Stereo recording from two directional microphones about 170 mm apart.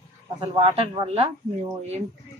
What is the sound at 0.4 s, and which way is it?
Speech, 30° right (ahead or behind).